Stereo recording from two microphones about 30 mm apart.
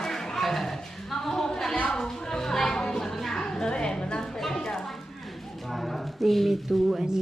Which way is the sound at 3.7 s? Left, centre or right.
Left.